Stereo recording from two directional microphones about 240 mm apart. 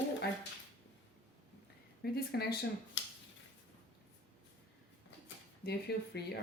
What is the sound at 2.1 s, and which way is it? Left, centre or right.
Speech, left.